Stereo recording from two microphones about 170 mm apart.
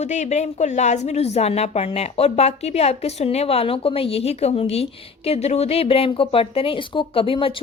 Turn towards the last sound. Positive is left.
turn(degrees=30)  # may be behind; listen again after turning